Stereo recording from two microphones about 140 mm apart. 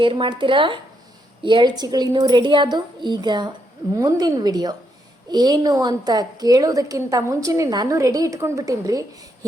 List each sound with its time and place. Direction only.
0.0 s a woman's voice: 35° right (ahead or behind)